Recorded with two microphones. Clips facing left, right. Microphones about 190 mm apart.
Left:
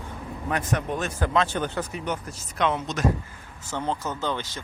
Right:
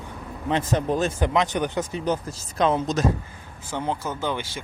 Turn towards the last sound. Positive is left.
turn(degrees=-10)  # may be behind; listen again after turning